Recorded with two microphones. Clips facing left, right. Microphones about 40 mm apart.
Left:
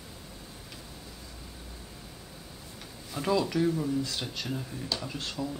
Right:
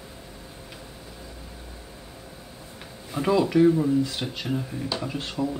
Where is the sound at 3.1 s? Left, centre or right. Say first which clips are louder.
Right 6 dB; centre.